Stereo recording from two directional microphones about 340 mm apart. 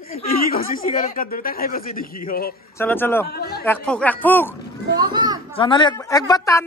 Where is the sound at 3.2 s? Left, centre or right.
Left.